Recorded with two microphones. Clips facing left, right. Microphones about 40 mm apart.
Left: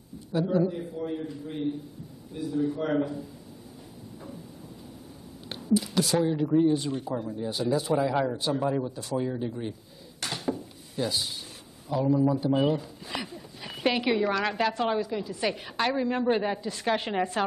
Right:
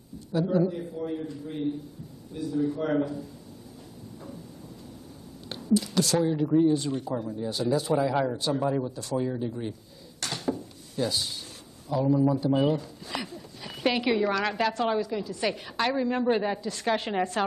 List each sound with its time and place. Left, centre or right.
0.3 s a man's voice: centre
5.5 s a woman's voice: centre
10.2 s dishes: centre
12.1 s a woman's voice: centre
12.4 s a sound: centre
13.8 s a woman's voice: centre